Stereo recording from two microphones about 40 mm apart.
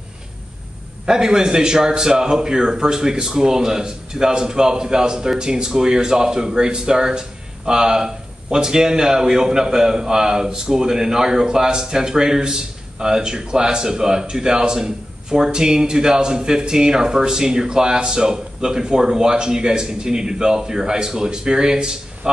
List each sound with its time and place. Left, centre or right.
1.0 s speech: centre